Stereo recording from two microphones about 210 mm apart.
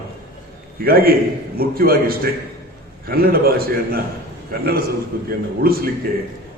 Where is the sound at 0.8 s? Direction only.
45° right (ahead or behind).